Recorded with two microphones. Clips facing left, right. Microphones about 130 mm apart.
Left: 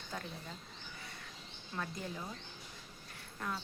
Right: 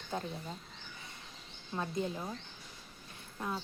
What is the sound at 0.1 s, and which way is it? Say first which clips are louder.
Speech: right 6 dB; 25° right (ahead or behind).